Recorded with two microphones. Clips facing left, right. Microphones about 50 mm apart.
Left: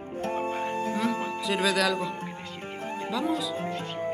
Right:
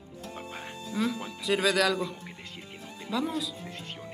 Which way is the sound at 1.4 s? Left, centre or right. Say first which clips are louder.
Right 1 dB; centre.